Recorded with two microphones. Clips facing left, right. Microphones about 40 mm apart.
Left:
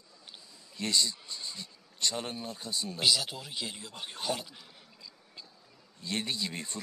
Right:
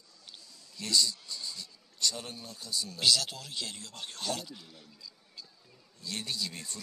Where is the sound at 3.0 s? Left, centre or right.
Centre.